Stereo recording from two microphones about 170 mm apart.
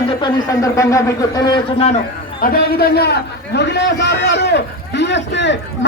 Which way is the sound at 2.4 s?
60° left (ahead or behind).